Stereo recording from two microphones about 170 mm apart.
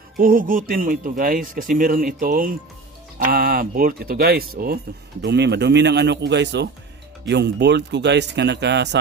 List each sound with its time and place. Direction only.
0.2 s speech: 55° right (ahead or behind)
5.2 s speech: 85° right